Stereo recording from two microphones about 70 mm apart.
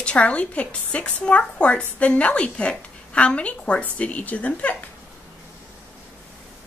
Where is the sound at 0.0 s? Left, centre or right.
Centre.